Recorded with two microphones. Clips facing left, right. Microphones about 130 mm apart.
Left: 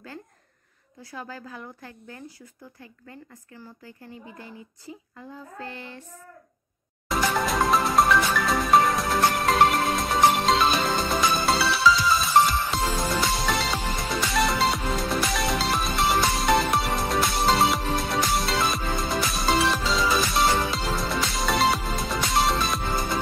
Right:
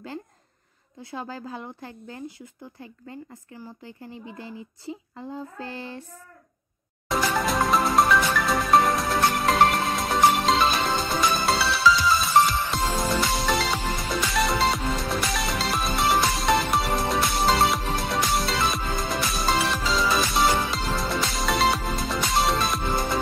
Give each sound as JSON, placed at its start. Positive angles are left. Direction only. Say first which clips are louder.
{"t": 1.1, "sound": "speech", "louder": "right 4 dB", "side_deg": -30}
{"t": 7.1, "sound": "music", "louder": "even", "side_deg": 0}